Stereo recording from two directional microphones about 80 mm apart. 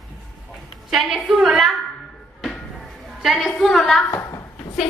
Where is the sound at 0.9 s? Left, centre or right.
Centre.